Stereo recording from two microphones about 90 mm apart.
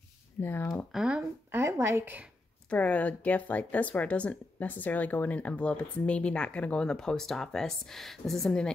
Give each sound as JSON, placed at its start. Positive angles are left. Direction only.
{"t": 0.4, "sound": "speech", "side_deg": 25}
{"t": 0.9, "sound": "speech", "side_deg": -10}
{"t": 1.5, "sound": "a woman's voice", "side_deg": -30}
{"t": 2.7, "sound": "speech", "side_deg": 15}